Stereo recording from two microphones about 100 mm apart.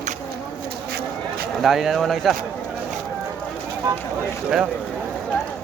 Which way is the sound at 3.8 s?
50° right (ahead or behind).